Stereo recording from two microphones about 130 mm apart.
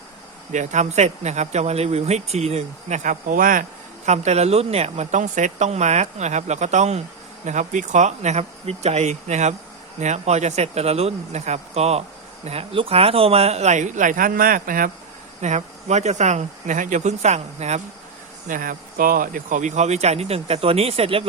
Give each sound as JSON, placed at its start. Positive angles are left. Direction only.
{"t": 0.5, "sound": "speech", "side_deg": -65}
{"t": 4.0, "sound": "speech", "side_deg": -60}
{"t": 15.4, "sound": "speech", "side_deg": -60}
{"t": 18.4, "sound": "speech", "side_deg": -90}